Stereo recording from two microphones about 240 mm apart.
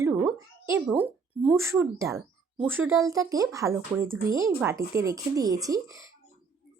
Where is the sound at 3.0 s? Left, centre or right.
Centre.